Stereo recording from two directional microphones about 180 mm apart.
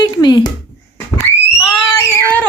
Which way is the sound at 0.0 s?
20° left (ahead or behind).